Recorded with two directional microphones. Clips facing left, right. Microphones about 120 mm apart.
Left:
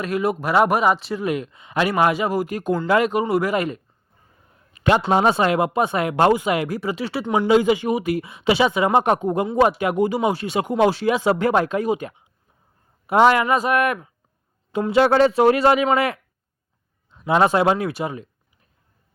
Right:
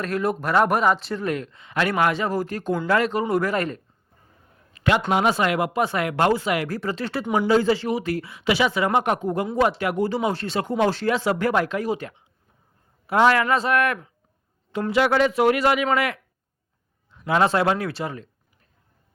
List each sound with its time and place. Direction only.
0.0 s speech: 10° left (ahead or behind)
4.7 s speech: 25° left (ahead or behind)
6.7 s speech: 10° left (ahead or behind)
9.0 s speech: 30° left (ahead or behind)
9.2 s speech: 20° left (ahead or behind)